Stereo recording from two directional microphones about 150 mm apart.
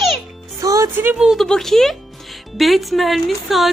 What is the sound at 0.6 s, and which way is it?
A woman's voice, 20° right (ahead or behind).